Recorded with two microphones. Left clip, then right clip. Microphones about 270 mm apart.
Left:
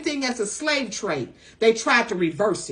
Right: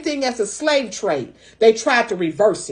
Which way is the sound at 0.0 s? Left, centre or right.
Centre.